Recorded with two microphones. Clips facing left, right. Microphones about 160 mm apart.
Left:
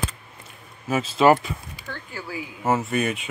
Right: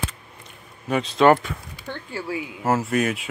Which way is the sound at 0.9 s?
5° left (ahead or behind).